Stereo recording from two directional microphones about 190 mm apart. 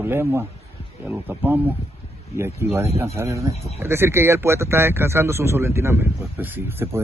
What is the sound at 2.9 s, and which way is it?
A man's voice, 15° right (ahead or behind).